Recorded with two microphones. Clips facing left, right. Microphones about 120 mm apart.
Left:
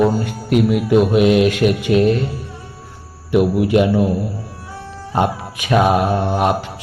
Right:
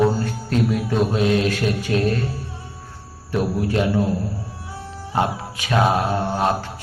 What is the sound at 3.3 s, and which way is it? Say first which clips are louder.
Speech: left 7 dB; 15° left (ahead or behind).